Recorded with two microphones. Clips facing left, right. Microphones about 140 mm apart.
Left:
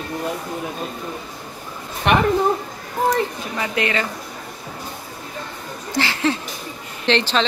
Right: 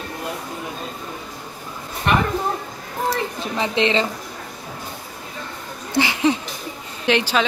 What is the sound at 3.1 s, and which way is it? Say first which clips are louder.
Speech: left 2 dB; 25° right (ahead or behind).